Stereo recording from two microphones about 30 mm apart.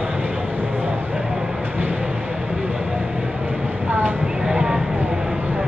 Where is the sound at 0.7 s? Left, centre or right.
Right.